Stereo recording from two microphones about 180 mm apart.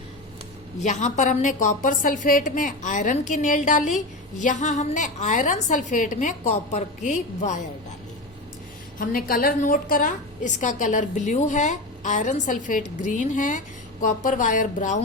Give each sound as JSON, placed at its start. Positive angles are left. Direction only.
{"t": 0.8, "sound": "a woman's voice", "side_deg": 40}
{"t": 9.0, "sound": "a woman's voice", "side_deg": 50}